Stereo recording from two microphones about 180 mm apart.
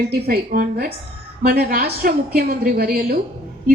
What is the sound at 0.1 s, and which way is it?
A woman's voice, 55° right (ahead or behind).